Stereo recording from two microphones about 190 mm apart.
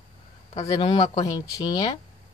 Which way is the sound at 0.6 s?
30° left (ahead or behind).